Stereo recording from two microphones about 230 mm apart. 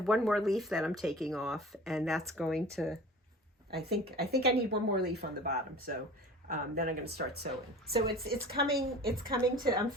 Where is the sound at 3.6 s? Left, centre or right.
Right.